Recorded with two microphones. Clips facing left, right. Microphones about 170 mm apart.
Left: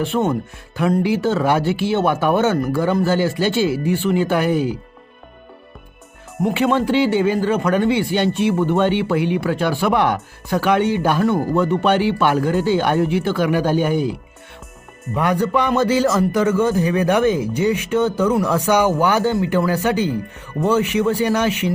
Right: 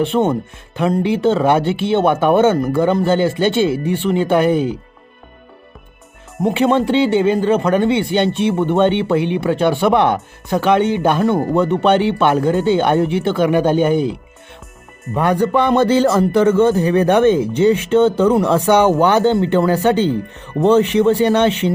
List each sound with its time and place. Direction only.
0.1 s speech: 25° right (ahead or behind)
6.4 s speech: 20° right (ahead or behind)
15.6 s speech: 30° right (ahead or behind)
17.3 s speech: 10° left (ahead or behind)
18.3 s speech: 25° right (ahead or behind)